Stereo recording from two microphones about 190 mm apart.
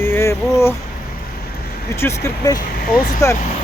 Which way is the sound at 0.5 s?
15° left (ahead or behind).